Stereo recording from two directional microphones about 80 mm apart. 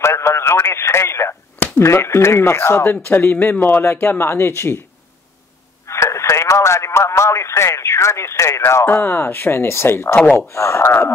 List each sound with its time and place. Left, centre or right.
0.0 s speech: left
5.9 s radio: left
8.8 s speech: left